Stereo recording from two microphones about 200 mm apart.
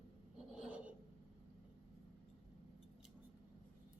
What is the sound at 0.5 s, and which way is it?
Filing, 5° right (ahead or behind).